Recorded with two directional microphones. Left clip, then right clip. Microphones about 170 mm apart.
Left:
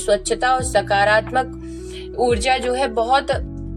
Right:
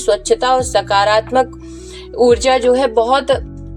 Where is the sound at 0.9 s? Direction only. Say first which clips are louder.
Right 3 dB; 20° right (ahead or behind).